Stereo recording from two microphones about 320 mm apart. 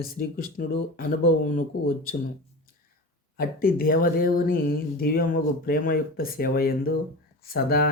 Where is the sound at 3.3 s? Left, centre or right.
Left.